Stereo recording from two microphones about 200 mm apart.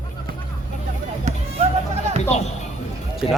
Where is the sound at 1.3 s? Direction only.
35° right (ahead or behind).